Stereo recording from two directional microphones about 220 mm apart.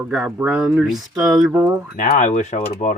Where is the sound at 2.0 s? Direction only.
35° left (ahead or behind).